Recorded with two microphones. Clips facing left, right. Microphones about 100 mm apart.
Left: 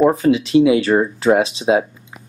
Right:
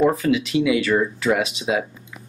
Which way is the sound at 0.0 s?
25° left (ahead or behind).